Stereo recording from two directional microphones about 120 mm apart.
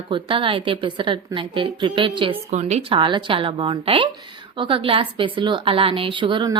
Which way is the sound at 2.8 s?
45° right (ahead or behind).